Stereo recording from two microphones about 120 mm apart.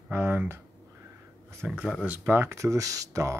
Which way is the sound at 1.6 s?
10° right (ahead or behind).